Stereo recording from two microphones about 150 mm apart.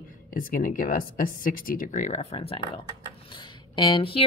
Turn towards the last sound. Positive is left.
turn(degrees=35)  # may be behind; listen again after turning